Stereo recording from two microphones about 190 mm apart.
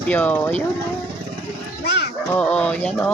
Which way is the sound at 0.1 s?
10° left (ahead or behind).